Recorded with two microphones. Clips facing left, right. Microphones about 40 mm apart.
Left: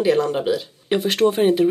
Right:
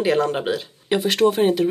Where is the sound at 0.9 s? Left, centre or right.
Centre.